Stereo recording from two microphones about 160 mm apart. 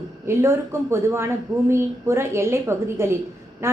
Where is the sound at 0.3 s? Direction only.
15° right (ahead or behind).